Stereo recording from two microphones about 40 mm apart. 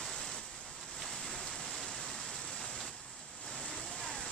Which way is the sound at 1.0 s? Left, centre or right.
Centre.